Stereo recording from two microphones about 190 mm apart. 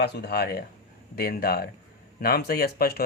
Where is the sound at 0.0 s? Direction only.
60° left (ahead or behind).